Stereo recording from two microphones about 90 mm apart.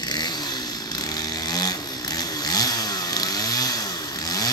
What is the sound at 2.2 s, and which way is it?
Chainsaw, 45° left (ahead or behind).